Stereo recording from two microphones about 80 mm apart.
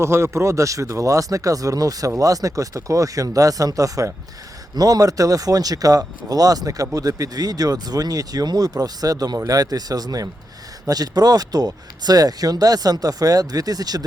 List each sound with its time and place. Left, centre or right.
0.0 s speech: right